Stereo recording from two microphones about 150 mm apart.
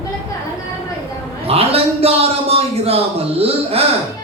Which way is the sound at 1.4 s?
40° right (ahead or behind).